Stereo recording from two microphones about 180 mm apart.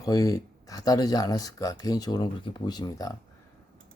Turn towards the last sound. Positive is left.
turn(degrees=20)  # may be behind; listen again after turning